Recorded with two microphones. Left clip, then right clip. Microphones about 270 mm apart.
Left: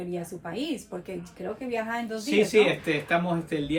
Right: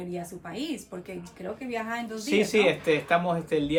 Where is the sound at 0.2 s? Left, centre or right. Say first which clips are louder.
Left 2 dB; centre.